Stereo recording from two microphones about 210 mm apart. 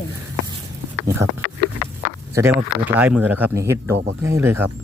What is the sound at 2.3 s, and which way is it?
Speech, 10° right (ahead or behind).